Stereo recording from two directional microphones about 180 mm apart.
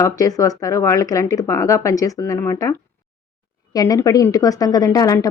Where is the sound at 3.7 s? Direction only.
20° left (ahead or behind).